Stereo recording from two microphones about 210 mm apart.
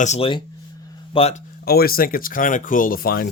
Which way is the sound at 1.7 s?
45° left (ahead or behind).